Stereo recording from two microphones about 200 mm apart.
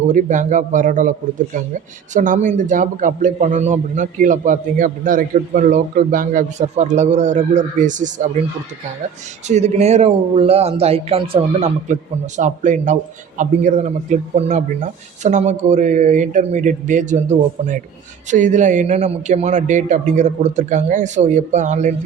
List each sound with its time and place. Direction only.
0.1 s a man's voice: 40° right (ahead or behind)
2.1 s a man's voice: 40° right (ahead or behind)
9.5 s a man's voice: 35° right (ahead or behind)